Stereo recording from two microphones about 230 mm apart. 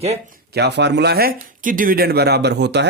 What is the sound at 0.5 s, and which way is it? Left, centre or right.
Speech, right.